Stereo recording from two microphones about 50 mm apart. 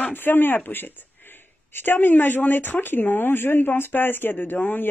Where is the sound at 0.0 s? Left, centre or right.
Left.